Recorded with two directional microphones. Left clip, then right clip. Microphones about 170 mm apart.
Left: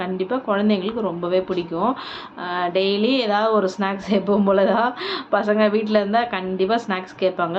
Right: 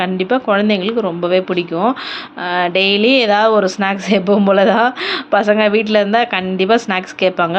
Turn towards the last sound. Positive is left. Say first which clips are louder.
# right 7 dB
turn(degrees=-20)  # may be behind; listen again after turning